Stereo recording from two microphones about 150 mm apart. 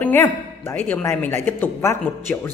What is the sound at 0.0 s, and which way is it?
A man's voice, 15° left (ahead or behind).